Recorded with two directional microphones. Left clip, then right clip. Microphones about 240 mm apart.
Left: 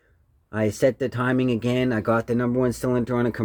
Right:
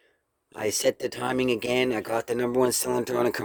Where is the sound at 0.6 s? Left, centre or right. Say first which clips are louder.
Left 3 dB; right.